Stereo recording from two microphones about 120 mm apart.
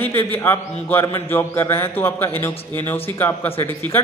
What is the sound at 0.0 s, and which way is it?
A man's voice, 15° left (ahead or behind).